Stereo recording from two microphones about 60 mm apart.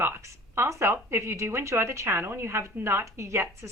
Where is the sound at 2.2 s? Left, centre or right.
Right.